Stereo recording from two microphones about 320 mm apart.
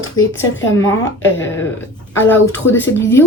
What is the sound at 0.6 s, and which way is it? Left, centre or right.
Speech, centre.